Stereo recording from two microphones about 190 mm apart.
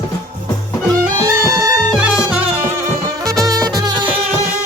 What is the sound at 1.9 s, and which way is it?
Music, 5° right (ahead or behind).